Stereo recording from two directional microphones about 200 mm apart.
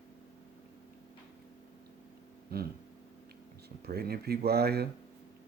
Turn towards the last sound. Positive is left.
turn(degrees=-50)  # may be behind; listen again after turning